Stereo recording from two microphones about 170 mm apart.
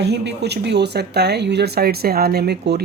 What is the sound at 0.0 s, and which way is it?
Speech, 80° right.